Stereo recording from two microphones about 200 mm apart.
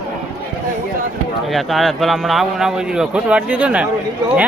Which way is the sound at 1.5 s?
Centre (ahead or behind).